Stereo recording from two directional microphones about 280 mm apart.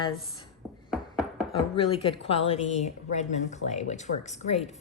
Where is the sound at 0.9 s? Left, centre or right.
Centre.